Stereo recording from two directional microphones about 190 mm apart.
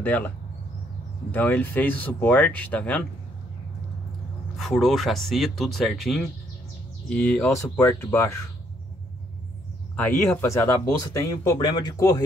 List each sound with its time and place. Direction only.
0.0 s speech: 10° left (ahead or behind)
1.3 s speech: 10° left (ahead or behind)
4.6 s speech: centre (ahead or behind); by 8.5 s 15° left (ahead or behind)
9.9 s speech: 10° left (ahead or behind)